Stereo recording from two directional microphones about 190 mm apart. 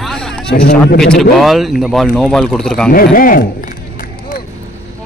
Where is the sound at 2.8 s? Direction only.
50° left (ahead or behind).